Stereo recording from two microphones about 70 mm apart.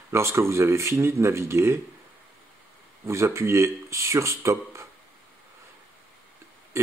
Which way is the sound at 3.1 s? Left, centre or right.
Right.